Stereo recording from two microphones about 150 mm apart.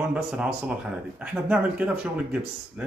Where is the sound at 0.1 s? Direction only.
5° right (ahead or behind).